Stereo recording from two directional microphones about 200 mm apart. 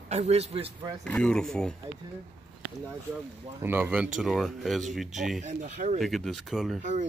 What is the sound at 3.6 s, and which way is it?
Speech, 10° right (ahead or behind).